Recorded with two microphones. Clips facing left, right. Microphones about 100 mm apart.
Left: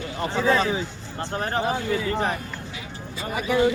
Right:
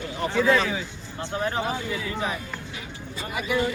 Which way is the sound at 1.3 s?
45° left (ahead or behind).